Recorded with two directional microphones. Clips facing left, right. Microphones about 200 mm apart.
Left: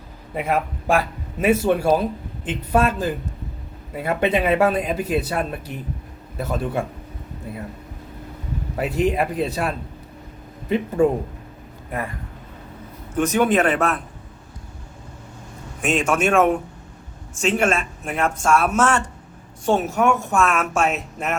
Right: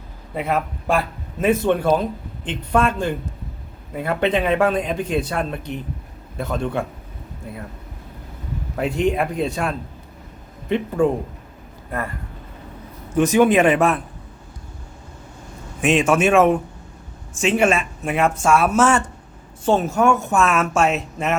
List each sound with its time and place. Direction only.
0.3 s a woman's voice: 10° left (ahead or behind)
8.7 s a woman's voice: 5° left (ahead or behind)
13.2 s speech: 10° right (ahead or behind)
15.8 s a woman's voice: 5° right (ahead or behind)